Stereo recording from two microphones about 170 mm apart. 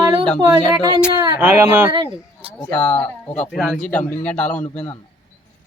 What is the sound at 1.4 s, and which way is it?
Speech, 10° right (ahead or behind).